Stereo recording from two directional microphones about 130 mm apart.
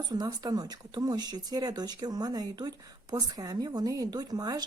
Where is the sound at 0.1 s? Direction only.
30° right (ahead or behind).